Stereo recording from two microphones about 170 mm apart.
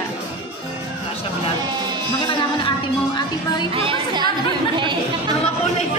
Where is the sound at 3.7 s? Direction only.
30° right (ahead or behind).